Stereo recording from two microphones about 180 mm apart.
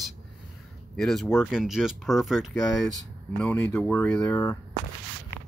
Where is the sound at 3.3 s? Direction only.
5° left (ahead or behind); by 4.6 s 20° left (ahead or behind).